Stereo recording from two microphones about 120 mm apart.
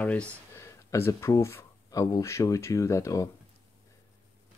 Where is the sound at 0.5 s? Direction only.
25° left (ahead or behind).